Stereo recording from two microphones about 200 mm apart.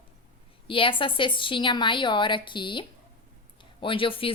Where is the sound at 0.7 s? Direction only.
25° left (ahead or behind).